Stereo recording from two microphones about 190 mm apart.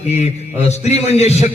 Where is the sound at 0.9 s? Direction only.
35° left (ahead or behind).